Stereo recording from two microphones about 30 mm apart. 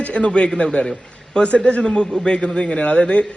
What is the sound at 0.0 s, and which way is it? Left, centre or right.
Speech, left.